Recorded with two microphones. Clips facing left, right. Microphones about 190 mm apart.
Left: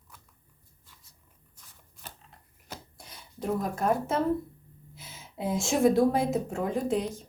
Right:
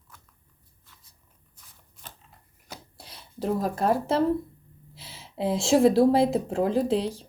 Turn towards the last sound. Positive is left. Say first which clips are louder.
# right 4 dB
turn(degrees=-30)  # may be behind; listen again after turning